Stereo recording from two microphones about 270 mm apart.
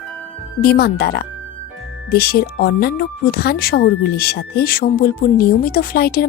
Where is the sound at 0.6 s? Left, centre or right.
Left.